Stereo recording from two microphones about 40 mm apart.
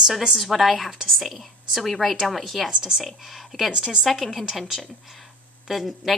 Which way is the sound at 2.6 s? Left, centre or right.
Centre.